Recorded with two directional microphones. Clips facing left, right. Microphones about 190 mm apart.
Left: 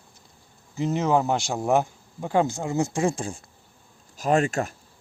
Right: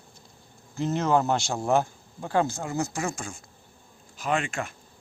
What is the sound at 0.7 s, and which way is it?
Speech, 10° left (ahead or behind).